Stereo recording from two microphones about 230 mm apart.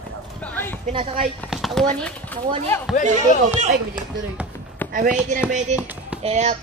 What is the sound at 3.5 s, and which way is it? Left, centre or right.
Speech, right.